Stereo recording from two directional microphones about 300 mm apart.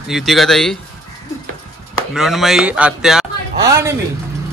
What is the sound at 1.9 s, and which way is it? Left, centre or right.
A man's voice, centre.